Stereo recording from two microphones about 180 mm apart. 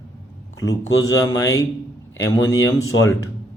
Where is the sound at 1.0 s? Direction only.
20° left (ahead or behind).